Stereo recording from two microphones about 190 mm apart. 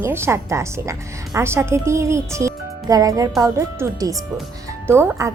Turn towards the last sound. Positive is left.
turn(degrees=-15)  # may be behind; listen again after turning